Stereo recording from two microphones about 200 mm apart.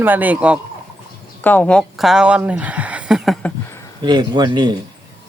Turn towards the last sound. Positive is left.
turn(degrees=-20)  # may be behind; listen again after turning